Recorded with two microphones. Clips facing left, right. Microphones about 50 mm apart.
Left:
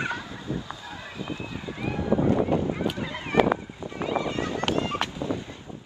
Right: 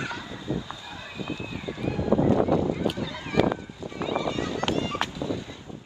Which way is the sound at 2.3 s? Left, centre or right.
Left.